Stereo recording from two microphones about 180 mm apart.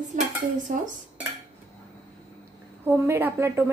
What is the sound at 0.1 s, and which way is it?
Dishes, 45° right (ahead or behind).